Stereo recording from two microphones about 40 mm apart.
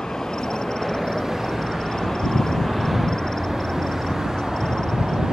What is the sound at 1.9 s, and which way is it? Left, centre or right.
Vehicle, centre.